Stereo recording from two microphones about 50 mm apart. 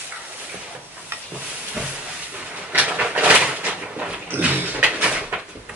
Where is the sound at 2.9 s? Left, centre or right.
Right.